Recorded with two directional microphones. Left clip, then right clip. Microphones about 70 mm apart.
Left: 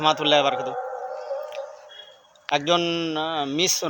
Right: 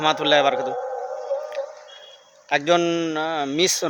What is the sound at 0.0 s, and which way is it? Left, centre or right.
Speech, right.